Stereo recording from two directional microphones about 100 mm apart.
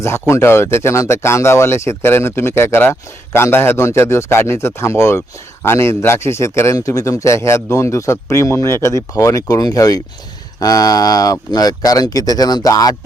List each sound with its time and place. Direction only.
0.0 s speech: 25° left (ahead or behind)